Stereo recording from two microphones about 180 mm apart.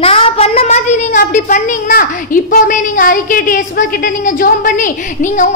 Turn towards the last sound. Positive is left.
turn(degrees=45)  # may be behind; listen again after turning